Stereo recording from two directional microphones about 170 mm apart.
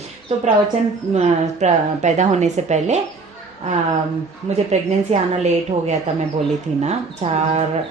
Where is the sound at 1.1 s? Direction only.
40° right (ahead or behind).